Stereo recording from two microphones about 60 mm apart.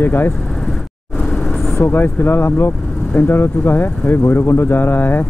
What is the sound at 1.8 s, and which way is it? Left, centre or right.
Speech, left.